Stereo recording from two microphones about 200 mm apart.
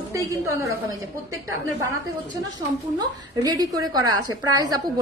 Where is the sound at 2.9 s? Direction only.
20° right (ahead or behind).